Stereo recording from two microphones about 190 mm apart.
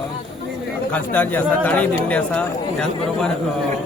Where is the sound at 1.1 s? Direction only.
10° left (ahead or behind).